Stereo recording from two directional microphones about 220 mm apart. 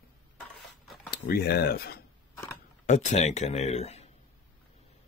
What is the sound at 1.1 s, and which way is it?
Speech, 45° left (ahead or behind).